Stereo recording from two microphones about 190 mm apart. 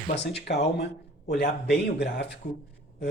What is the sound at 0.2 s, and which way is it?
Speech, 65° left (ahead or behind).